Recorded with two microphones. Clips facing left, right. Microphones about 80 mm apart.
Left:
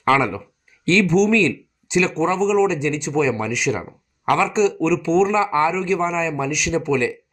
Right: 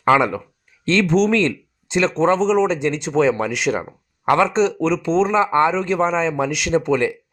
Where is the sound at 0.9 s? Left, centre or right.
Right.